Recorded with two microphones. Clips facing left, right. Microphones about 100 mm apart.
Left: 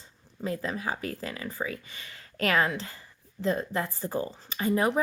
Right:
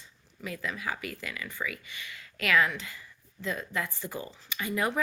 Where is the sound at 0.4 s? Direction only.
35° left (ahead or behind).